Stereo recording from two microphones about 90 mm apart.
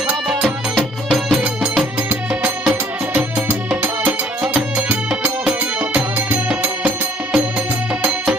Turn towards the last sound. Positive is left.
turn(degrees=-20)  # may be behind; listen again after turning